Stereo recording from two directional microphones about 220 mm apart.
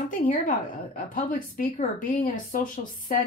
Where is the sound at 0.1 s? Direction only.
40° left (ahead or behind).